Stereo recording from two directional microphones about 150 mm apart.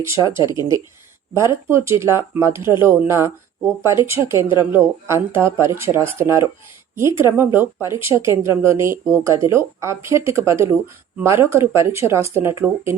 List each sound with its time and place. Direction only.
0.0 s speech: 20° right (ahead or behind)